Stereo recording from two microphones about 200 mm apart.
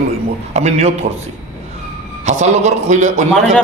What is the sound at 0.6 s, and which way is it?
Speech, 35° right (ahead or behind).